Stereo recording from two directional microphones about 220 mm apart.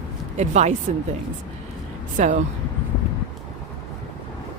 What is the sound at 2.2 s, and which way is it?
Speech, 35° right (ahead or behind).